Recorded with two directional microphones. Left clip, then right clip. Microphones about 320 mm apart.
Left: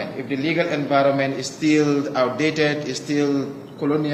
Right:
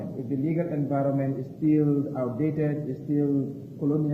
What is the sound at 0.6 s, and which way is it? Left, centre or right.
Speech, centre.